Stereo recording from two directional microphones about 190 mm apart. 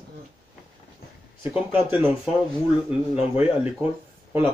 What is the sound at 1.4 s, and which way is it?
Speech, 10° right (ahead or behind).